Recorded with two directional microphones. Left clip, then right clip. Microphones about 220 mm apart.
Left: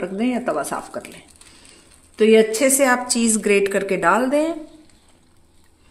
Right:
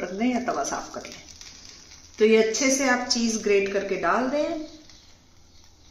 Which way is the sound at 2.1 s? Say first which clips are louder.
Left 5 dB; 45° left (ahead or behind).